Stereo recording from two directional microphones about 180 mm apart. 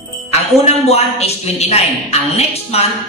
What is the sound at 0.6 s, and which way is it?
A man's voice, 35° left (ahead or behind).